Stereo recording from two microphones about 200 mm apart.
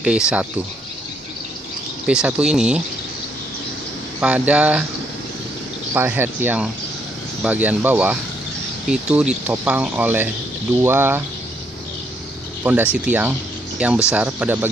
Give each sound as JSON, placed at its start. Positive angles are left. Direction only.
{"t": 0.0, "sound": "speech", "side_deg": -5}
{"t": 2.0, "sound": "speech", "side_deg": -5}
{"t": 4.2, "sound": "speech", "side_deg": -5}
{"t": 5.9, "sound": "speech", "side_deg": -10}
{"t": 12.9, "sound": "speech", "side_deg": -5}